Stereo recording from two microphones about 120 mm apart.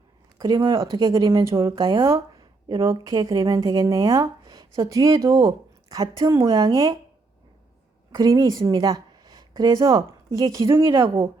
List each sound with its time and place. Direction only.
0.3 s speech: 35° right (ahead or behind)
1.7 s a woman's voice: 45° right (ahead or behind)
2.0 s speech: 25° right (ahead or behind)
8.1 s speech: 30° right (ahead or behind)
11.0 s a woman's voice: 45° right (ahead or behind)